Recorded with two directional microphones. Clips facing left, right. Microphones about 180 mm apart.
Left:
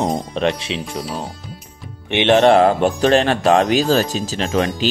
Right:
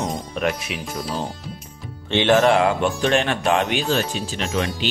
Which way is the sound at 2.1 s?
25° left (ahead or behind).